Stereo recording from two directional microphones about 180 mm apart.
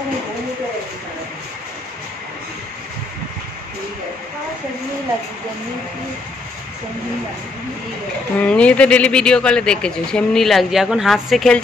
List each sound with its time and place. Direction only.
8.4 s speech: 5° left (ahead or behind)